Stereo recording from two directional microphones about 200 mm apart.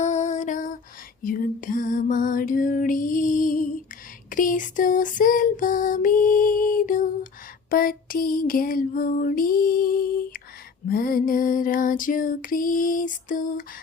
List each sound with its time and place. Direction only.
0.0 s lullaby: 35° left (ahead or behind)
4.3 s a sound: 40° left (ahead or behind)
7.7 s music: 45° left (ahead or behind)